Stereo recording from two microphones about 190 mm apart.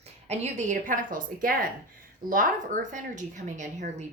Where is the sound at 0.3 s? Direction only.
35° right (ahead or behind).